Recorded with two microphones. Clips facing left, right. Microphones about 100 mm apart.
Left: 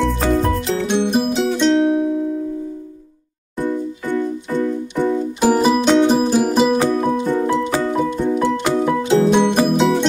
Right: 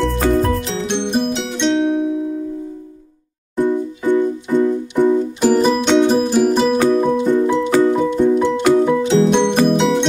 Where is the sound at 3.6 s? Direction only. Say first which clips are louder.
Right 4 dB; 20° right (ahead or behind).